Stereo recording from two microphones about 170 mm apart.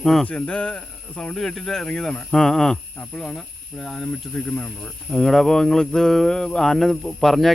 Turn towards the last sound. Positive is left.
turn(degrees=0)  # may be behind; listen again after turning